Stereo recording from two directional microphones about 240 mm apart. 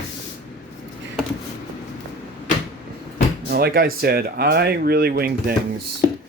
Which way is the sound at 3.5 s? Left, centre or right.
Right.